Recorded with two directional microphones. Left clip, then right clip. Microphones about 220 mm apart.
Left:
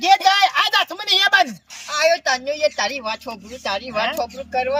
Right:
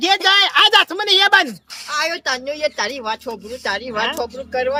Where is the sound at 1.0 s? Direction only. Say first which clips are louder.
Right 2 dB; centre (ahead or behind).